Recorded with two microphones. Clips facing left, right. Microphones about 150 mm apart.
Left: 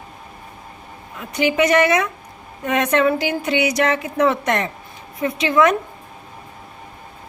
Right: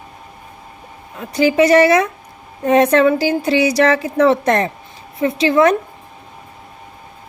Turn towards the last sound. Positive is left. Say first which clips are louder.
# right 3 dB
turn(degrees=-30)  # may be behind; listen again after turning